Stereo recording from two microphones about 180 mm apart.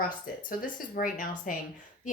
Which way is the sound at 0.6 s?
50° left (ahead or behind).